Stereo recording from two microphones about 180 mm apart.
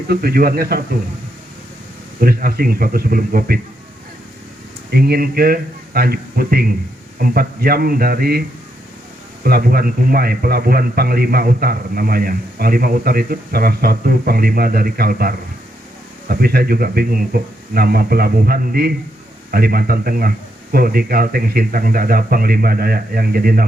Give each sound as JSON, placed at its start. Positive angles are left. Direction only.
{"t": 0.1, "sound": "speech", "side_deg": -55}
{"t": 2.2, "sound": "speech", "side_deg": -55}
{"t": 4.9, "sound": "speech", "side_deg": -60}